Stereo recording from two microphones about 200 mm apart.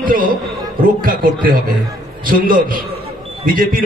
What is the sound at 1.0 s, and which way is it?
A man's voice, 45° right (ahead or behind).